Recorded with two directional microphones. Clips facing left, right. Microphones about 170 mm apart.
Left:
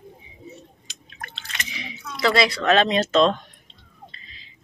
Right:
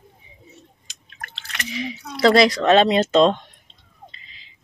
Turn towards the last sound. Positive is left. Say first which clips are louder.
# right 3 dB
turn(degrees=-30)  # may be behind; listen again after turning